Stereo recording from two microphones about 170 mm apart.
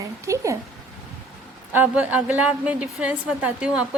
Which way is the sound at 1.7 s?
10° right (ahead or behind).